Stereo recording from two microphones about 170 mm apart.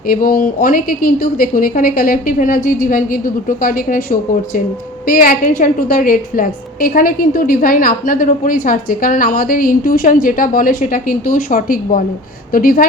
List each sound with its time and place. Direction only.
0.1 s a woman's voice: 55° left (ahead or behind)